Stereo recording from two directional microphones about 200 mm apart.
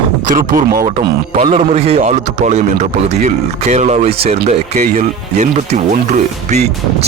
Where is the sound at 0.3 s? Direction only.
50° right (ahead or behind).